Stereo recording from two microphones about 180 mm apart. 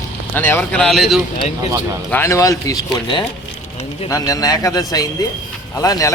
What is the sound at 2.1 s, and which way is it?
Speech, 15° left (ahead or behind).